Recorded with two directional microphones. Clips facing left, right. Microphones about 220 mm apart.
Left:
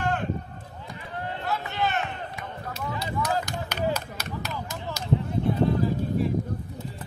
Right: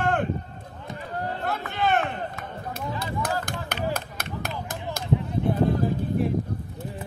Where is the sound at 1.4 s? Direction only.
50° right (ahead or behind).